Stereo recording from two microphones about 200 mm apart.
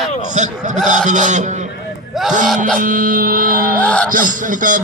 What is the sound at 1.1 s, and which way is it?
Speech, 40° right (ahead or behind).